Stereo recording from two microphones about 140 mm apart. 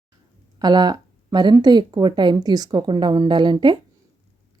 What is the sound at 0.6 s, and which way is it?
A woman's voice, 30° right (ahead or behind).